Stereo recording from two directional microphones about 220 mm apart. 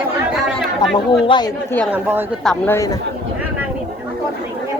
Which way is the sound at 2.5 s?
10° left (ahead or behind).